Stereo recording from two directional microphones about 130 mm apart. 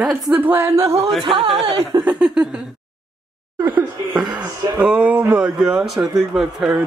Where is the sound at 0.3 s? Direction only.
15° right (ahead or behind).